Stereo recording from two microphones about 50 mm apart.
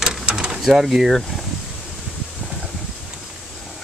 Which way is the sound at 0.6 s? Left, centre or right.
Centre.